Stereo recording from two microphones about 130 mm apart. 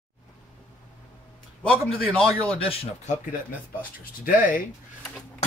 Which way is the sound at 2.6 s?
45° left (ahead or behind).